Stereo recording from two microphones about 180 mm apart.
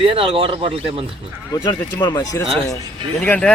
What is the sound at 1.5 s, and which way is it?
Speech, 20° left (ahead or behind).